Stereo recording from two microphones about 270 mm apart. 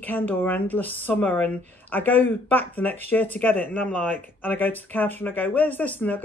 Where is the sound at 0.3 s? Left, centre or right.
Centre.